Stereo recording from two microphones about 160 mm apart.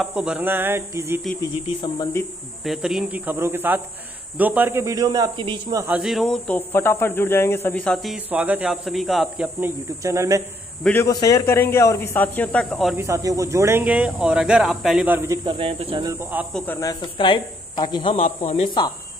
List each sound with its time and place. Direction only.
0.0 s speech: 5° right (ahead or behind)
1.4 s speech: 30° left (ahead or behind)
2.6 s a man's voice: centre (ahead or behind); by 5.9 s 25° right (ahead or behind)
5.9 s speech: 5° right (ahead or behind)
8.3 s speech: 10° right (ahead or behind)
9.6 s a man's voice: 20° right (ahead or behind)
10.8 s speech: 10° left (ahead or behind)
11.1 s speech: 20° left (ahead or behind); by 12.9 s centre (ahead or behind)
12.9 s speech: 20° right (ahead or behind)
15.5 s speech: 35° right (ahead or behind)
16.1 s speech: 10° right (ahead or behind)
16.5 s speech: 10° left (ahead or behind)
17.0 s speech: 30° left (ahead or behind)
18.2 s speech: 45° left (ahead or behind)